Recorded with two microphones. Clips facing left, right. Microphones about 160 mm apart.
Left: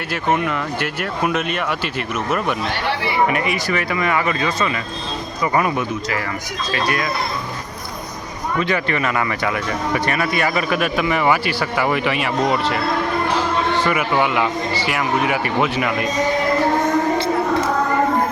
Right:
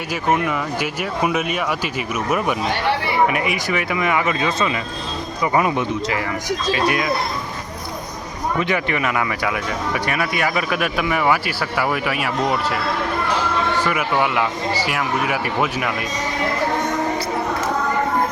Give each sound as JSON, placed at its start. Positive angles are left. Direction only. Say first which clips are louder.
{"t": 0.1, "sound": "speech", "louder": "even", "side_deg": -5}
{"t": 8.5, "sound": "speech", "louder": "left 2 dB", "side_deg": -15}
{"t": 13.8, "sound": "speech", "louder": "left 2 dB", "side_deg": 0}